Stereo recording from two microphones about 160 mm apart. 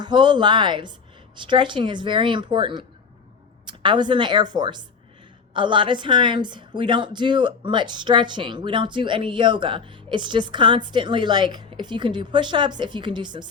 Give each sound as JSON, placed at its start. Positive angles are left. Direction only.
{"t": 0.0, "sound": "a woman's voice", "side_deg": -30}